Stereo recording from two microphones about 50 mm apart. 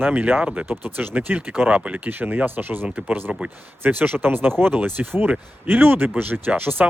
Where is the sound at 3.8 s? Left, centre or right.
Right.